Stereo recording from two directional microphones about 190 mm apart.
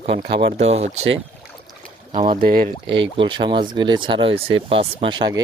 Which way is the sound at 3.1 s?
25° right (ahead or behind).